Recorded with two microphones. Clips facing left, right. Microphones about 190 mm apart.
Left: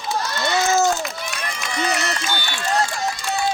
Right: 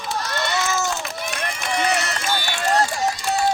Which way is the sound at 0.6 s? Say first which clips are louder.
Left 6 dB; 45° left (ahead or behind).